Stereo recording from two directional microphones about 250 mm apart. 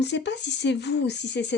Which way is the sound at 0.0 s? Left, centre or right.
Left.